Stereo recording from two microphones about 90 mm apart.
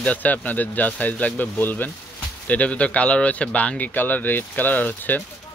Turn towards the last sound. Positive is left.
turn(degrees=20)  # may be behind; listen again after turning